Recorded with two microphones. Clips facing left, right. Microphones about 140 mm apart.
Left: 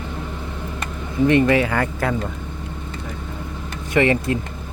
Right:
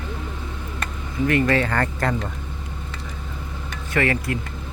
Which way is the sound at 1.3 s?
15° left (ahead or behind).